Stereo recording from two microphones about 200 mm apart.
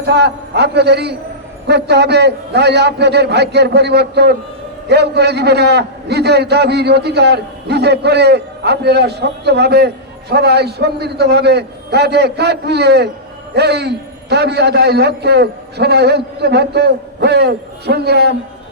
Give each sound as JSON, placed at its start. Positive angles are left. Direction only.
{"t": 0.0, "sound": "a man's voice", "side_deg": -55}